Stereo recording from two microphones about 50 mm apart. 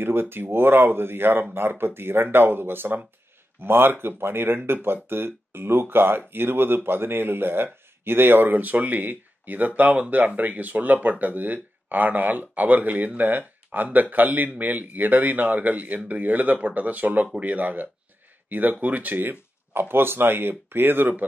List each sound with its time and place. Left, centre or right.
0.0 s speech: right